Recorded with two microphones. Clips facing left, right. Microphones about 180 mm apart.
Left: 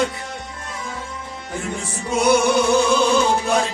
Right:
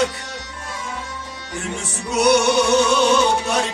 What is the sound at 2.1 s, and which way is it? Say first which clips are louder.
Music: right 1 dB; 75° right (ahead or behind).